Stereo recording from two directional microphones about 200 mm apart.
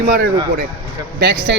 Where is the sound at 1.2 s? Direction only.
55° right (ahead or behind).